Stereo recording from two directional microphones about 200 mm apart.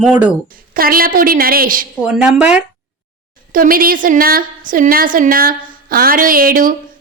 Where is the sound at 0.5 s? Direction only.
45° right (ahead or behind).